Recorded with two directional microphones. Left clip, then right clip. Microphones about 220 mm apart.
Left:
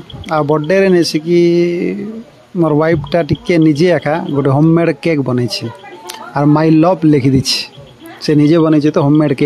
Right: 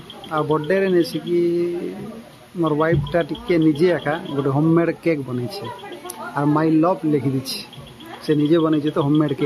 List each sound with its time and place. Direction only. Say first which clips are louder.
0.3 s speech: left 7 dB; 35° left (ahead or behind)